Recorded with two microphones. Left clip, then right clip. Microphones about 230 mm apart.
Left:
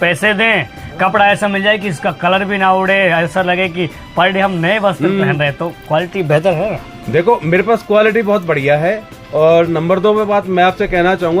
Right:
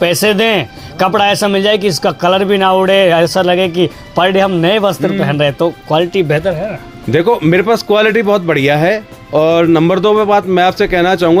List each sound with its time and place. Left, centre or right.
0.0 s speech: right
7.1 s speech: right